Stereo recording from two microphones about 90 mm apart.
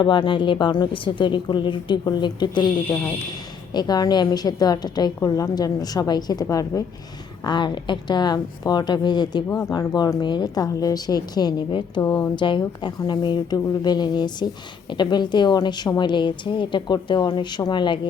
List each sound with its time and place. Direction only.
0.0 s speech: 65° left (ahead or behind)
3.7 s a woman's voice: 50° left (ahead or behind)
7.4 s a woman's voice: 60° left (ahead or behind)
12.2 s speech: 60° left (ahead or behind)